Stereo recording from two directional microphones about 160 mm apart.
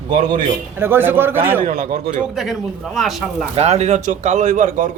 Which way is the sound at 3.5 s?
45° right (ahead or behind).